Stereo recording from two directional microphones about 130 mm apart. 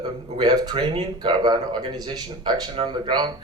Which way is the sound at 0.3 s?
35° right (ahead or behind).